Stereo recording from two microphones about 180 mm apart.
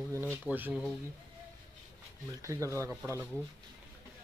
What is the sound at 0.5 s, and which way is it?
Speech, 10° right (ahead or behind).